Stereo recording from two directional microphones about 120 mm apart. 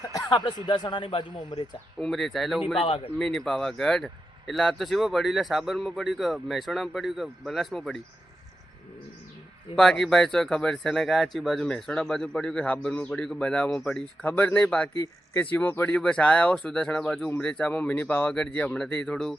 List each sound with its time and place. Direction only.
0.3 s speech: 40° left (ahead or behind)
2.0 s speech: centre (ahead or behind)
2.7 s speech: 50° left (ahead or behind)
3.2 s speech: 5° left (ahead or behind)
9.7 s a man's voice: 5° left (ahead or behind)
14.9 s a man's voice: 25° left (ahead or behind)
16.0 s a man's voice: 5° left (ahead or behind)